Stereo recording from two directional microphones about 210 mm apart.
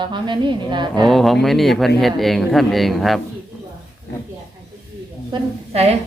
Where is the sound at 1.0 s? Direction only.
Centre (ahead or behind).